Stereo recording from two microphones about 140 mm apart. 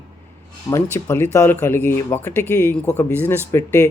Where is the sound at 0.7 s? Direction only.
25° left (ahead or behind).